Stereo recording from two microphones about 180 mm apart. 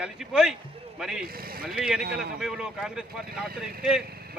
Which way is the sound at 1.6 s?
Centre (ahead or behind).